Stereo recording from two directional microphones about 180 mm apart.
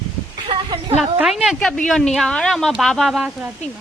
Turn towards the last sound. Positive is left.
turn(degrees=-5)  # may be behind; listen again after turning